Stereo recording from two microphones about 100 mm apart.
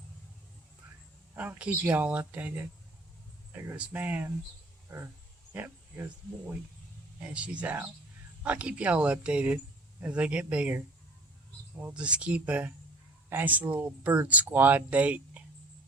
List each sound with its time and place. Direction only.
1.3 s speech: 15° right (ahead or behind)
5.5 s speech: 20° right (ahead or behind)
7.2 s speech: 10° right (ahead or behind)
11.8 s speech: 15° right (ahead or behind)